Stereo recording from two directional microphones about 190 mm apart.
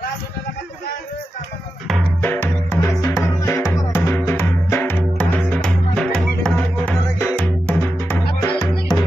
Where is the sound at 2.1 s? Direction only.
10° left (ahead or behind).